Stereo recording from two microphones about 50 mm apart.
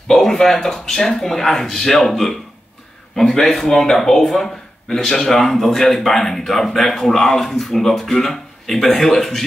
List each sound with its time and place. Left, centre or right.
0.1 s speech: centre